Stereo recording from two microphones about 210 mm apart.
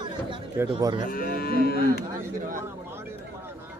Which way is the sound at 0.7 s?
20° right (ahead or behind).